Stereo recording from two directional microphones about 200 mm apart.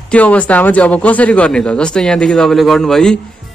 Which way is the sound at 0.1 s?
5° left (ahead or behind).